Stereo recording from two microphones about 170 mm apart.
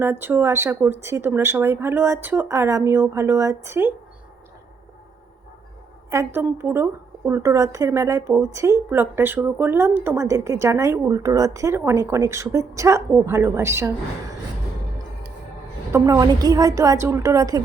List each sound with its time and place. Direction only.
0.0 s speech: 15° right (ahead or behind)
6.1 s speech: 15° right (ahead or behind)
15.9 s a woman's voice: 20° right (ahead or behind)